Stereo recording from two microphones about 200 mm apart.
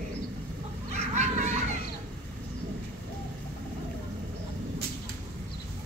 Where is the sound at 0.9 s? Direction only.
35° right (ahead or behind).